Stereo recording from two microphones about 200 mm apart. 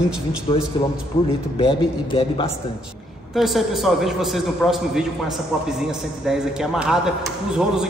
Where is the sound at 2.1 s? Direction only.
25° left (ahead or behind).